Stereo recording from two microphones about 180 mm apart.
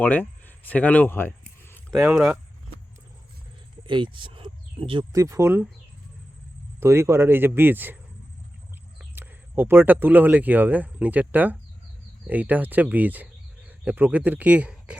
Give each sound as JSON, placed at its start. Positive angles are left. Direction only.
{"t": 0.0, "sound": "a sound", "side_deg": 10}
{"t": 1.9, "sound": "speech", "side_deg": -5}
{"t": 3.8, "sound": "speech", "side_deg": -25}
{"t": 5.1, "sound": "speech", "side_deg": -15}
{"t": 6.7, "sound": "speech", "side_deg": -15}
{"t": 9.1, "sound": "speech", "side_deg": -10}